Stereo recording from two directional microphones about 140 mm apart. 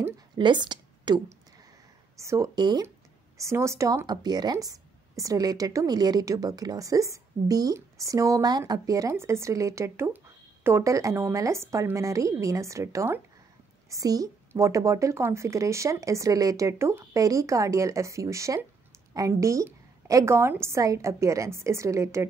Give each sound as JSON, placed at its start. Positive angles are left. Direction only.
{"t": 0.4, "sound": "a woman's voice", "side_deg": -35}
{"t": 2.1, "sound": "speech", "side_deg": -20}